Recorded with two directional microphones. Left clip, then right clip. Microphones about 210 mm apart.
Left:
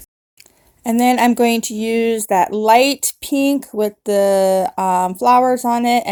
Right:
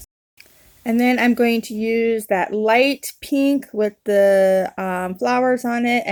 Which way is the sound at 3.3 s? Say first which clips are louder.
Left 1 dB; 85° left.